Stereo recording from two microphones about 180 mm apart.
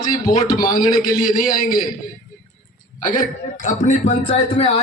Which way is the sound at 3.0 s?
45° left (ahead or behind).